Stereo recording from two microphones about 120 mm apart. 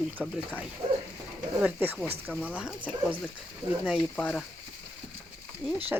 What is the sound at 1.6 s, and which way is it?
Speech, 15° right (ahead or behind).